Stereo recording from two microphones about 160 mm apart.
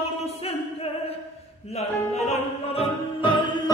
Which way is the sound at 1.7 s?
45° left (ahead or behind).